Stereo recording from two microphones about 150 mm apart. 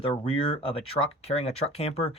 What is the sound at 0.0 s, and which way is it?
Speech, 40° left (ahead or behind).